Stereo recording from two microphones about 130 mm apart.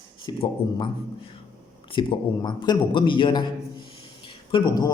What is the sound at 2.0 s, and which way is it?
Speech, 35° left (ahead or behind).